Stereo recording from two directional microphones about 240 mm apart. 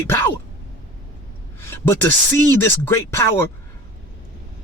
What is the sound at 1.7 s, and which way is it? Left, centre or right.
Speech, centre.